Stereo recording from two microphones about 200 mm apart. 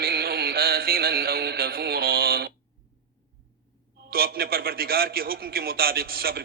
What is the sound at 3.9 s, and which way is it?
A man's voice, 50° right (ahead or behind).